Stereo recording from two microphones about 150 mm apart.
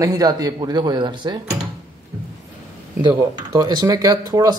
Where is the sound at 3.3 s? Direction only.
25° right (ahead or behind).